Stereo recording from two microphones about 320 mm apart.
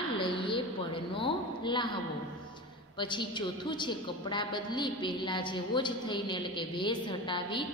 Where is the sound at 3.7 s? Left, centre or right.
Centre.